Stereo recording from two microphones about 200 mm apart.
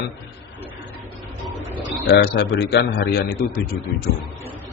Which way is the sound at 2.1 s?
55° left (ahead or behind).